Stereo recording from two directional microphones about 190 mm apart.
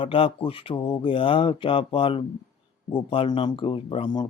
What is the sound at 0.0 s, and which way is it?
Speech, 30° left (ahead or behind).